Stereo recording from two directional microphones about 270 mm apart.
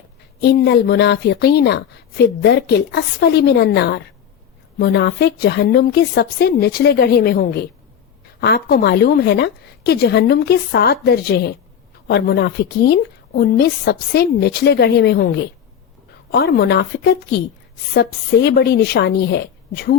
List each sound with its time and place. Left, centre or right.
0.4 s a woman's voice: left